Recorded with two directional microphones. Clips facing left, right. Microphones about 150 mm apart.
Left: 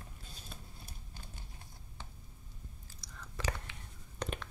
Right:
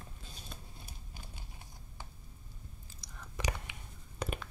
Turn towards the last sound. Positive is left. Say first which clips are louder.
# right 1 dB
turn(degrees=-5)  # may be behind; listen again after turning